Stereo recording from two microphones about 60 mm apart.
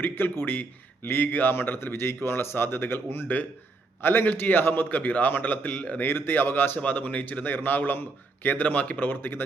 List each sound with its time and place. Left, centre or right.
0.0 s a man's voice: left